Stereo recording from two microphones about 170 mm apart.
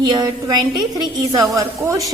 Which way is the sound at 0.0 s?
25° right (ahead or behind).